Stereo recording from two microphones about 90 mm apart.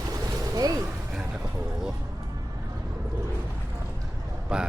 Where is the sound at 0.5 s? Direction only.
45° right (ahead or behind).